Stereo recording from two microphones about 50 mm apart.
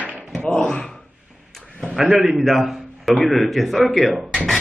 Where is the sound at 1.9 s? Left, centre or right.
Centre.